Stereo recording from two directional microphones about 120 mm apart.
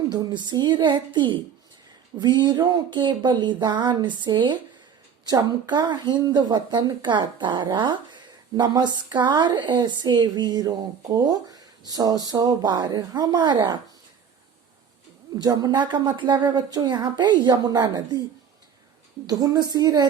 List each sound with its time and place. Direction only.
0.1 s a woman's voice: 35° right (ahead or behind)
15.4 s a woman's voice: 35° right (ahead or behind)
19.3 s a woman's voice: 35° right (ahead or behind)